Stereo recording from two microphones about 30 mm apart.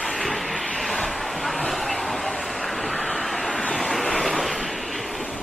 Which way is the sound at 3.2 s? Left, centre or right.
Centre.